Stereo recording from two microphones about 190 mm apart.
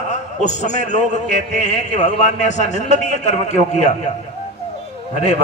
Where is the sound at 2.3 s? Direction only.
35° left (ahead or behind).